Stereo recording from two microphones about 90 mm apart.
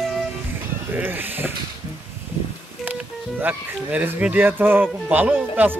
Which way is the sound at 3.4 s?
20° right (ahead or behind).